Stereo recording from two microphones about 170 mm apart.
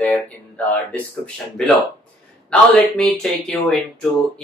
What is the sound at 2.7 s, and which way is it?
Speech, 5° left (ahead or behind).